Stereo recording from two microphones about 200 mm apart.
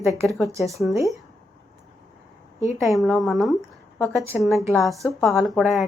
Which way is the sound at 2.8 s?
Centre (ahead or behind).